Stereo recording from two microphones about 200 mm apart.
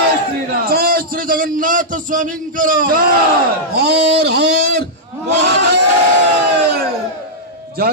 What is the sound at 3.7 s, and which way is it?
A man's voice, 55° right (ahead or behind).